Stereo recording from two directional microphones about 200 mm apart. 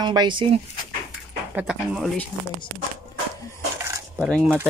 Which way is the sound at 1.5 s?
5° right (ahead or behind).